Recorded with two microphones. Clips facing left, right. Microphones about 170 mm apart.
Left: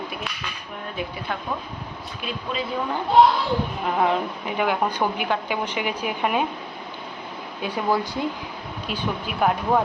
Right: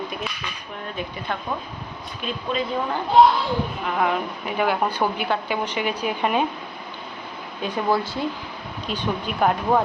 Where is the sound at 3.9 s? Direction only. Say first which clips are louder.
Left 2 dB; 30° left (ahead or behind).